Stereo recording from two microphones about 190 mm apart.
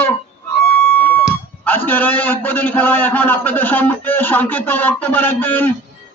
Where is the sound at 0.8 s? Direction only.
10° left (ahead or behind).